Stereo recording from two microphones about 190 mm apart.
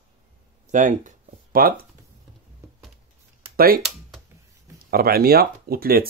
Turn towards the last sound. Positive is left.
turn(degrees=-50)  # may be behind; listen again after turning